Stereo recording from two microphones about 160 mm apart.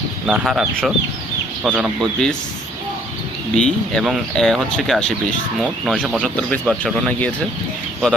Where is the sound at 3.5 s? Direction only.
5° left (ahead or behind).